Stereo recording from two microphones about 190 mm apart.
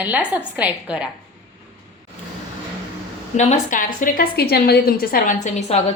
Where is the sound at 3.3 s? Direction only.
40° left (ahead or behind).